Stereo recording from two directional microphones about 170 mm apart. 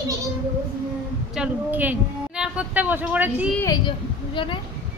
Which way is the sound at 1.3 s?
10° right (ahead or behind).